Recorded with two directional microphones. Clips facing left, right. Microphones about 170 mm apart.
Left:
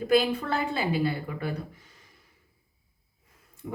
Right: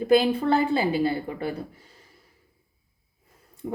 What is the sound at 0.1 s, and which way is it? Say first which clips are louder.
A woman's voice: right 4 dB; 30° right (ahead or behind).